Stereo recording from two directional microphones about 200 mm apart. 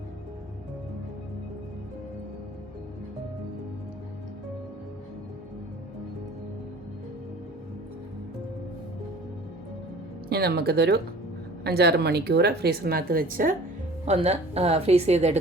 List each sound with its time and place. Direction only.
10.2 s speech: 50° right (ahead or behind)
14.0 s a woman's voice: 30° right (ahead or behind)